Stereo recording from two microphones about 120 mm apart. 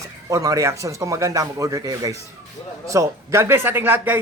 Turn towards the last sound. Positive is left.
turn(degrees=-15)  # may be behind; listen again after turning